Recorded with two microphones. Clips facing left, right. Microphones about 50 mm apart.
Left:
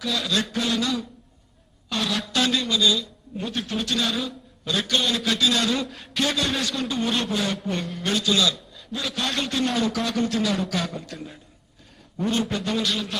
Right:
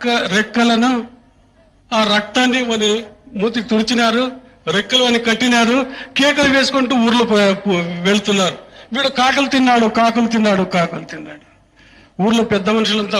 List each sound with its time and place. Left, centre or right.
0.0 s a man's voice: right
1.9 s a man's voice: right
2.3 s speech: right
3.3 s a man's voice: right
4.7 s a man's voice: right
5.9 s a man's voice: right
9.8 s a man's voice: right